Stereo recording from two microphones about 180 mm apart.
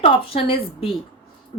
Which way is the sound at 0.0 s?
30° left (ahead or behind).